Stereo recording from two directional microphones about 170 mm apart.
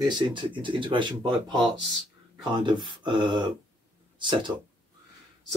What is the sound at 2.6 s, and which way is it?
Speech, 30° right (ahead or behind).